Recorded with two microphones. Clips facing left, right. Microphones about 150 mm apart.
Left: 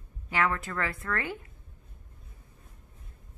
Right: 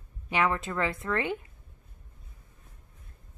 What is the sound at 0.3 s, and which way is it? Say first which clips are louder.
Speech: right 2 dB; 20° right (ahead or behind).